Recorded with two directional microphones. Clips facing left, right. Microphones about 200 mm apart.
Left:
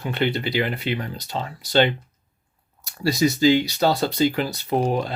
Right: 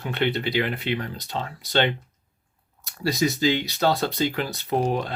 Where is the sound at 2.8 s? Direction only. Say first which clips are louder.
Left 3 dB; centre (ahead or behind).